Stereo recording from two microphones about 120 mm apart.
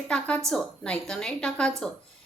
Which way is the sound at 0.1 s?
10° left (ahead or behind).